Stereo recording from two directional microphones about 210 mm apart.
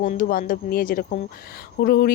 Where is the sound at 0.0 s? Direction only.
40° left (ahead or behind).